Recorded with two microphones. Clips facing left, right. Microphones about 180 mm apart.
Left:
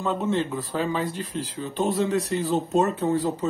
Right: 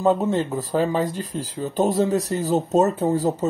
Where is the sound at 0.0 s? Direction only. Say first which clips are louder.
Right 5 dB; 40° right (ahead or behind).